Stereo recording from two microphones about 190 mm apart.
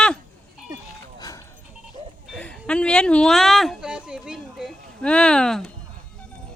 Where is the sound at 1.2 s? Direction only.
20° left (ahead or behind).